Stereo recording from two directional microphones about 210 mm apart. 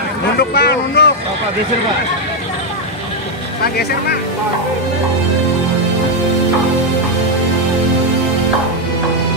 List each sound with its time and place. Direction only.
0.4 s speech: 50° left (ahead or behind)